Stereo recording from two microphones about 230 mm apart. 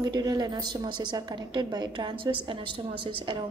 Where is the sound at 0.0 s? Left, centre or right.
Centre.